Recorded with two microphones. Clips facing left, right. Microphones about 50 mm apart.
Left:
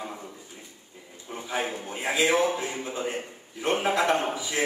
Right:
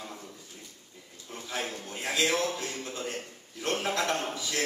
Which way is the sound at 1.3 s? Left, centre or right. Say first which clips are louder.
Left 5 dB; centre.